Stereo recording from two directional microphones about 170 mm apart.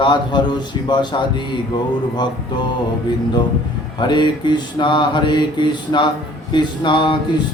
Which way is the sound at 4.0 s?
25° left (ahead or behind).